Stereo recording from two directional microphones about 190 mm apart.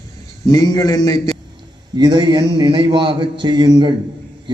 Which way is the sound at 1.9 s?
20° right (ahead or behind).